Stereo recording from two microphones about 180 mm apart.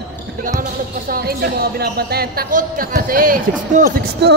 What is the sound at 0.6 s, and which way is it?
Speech, 55° right (ahead or behind).